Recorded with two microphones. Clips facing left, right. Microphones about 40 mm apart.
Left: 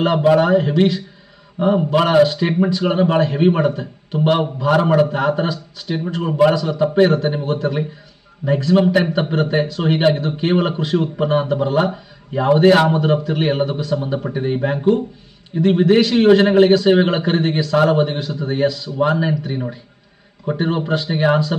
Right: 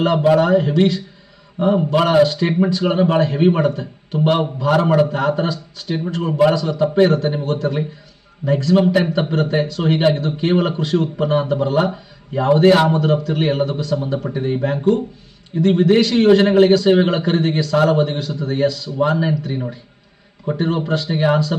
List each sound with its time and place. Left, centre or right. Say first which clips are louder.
0.0 s a man's voice: even; centre